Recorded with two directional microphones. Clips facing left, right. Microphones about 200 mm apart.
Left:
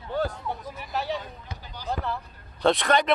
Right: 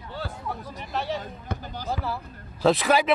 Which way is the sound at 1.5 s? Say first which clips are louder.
Right 8 dB; 50° right (ahead or behind).